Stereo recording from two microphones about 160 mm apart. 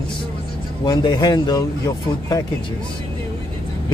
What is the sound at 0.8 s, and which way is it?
A man's voice, 30° left (ahead or behind).